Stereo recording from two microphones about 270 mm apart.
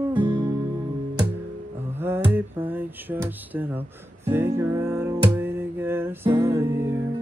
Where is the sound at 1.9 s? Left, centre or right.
Centre.